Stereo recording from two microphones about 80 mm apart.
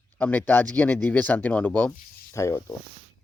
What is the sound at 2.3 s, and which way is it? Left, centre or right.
Speech, left.